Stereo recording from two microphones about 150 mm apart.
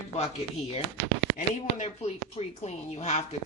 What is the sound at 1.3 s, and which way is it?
Speech, 50° left (ahead or behind).